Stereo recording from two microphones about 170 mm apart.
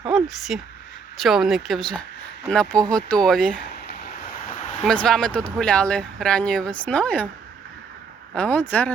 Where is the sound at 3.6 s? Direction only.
70° left (ahead or behind).